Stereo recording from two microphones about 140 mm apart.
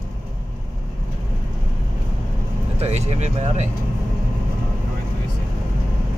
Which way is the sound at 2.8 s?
50° right (ahead or behind).